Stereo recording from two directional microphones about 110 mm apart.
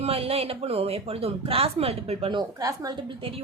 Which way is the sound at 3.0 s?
55° right (ahead or behind).